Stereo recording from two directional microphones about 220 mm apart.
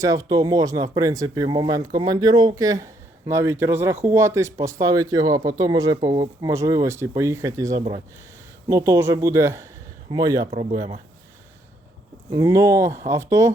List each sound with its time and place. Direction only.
0.0 s speech: 15° right (ahead or behind)
10.5 s speech: 25° right (ahead or behind)
12.3 s speech: 15° right (ahead or behind)